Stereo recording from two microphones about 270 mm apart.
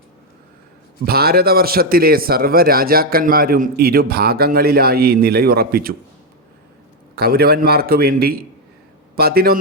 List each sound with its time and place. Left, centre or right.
1.0 s a man's voice: right
7.2 s a man's voice: right